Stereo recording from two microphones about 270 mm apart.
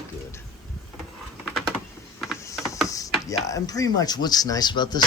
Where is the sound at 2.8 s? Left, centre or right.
Centre.